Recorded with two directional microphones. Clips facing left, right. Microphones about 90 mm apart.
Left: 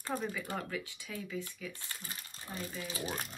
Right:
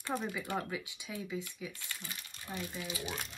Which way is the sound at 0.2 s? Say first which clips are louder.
Right 1 dB; 15° right (ahead or behind).